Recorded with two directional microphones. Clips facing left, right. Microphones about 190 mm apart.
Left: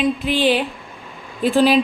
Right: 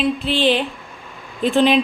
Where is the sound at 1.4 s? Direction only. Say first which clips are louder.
Even; 5° left (ahead or behind).